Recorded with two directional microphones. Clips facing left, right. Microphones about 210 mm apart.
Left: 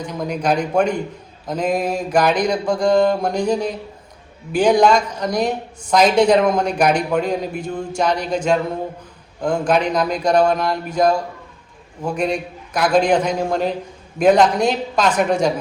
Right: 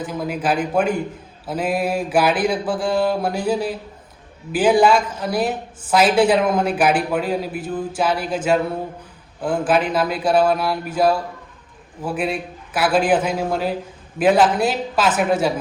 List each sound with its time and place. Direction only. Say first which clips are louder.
0.0 s a woman's voice: left 1 dB; 5° right (ahead or behind)
1.5 s mantra: left 1 dB; 5° right (ahead or behind)
4.5 s a woman's voice: left 1 dB; 5° right (ahead or behind)
12.0 s mantra: left 2 dB; 5° right (ahead or behind)
14.2 s a woman's voice: left 2 dB; 5° right (ahead or behind)